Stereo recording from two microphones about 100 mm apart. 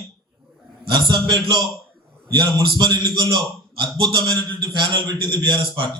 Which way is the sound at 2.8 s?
50° right (ahead or behind).